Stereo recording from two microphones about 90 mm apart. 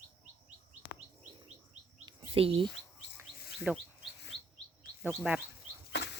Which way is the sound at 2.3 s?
90° right.